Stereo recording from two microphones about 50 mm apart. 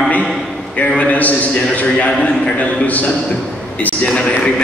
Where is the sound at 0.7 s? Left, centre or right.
Left.